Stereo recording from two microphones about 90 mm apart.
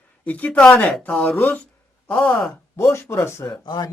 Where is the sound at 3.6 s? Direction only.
55° left (ahead or behind).